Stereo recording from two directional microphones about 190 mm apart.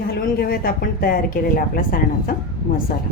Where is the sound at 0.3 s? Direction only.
55° left (ahead or behind).